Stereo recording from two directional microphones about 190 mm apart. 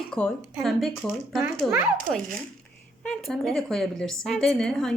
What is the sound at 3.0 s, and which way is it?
A woman's voice, 5° left (ahead or behind).